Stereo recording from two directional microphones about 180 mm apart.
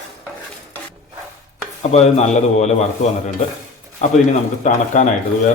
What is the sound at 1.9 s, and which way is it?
A man's voice, 40° left (ahead or behind).